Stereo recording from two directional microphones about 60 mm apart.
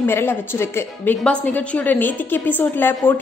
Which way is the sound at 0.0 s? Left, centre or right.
Left.